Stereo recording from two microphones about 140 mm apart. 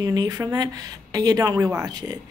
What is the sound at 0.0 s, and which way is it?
Speech, 25° right (ahead or behind).